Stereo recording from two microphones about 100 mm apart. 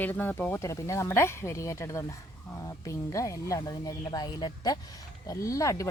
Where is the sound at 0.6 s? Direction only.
30° left (ahead or behind).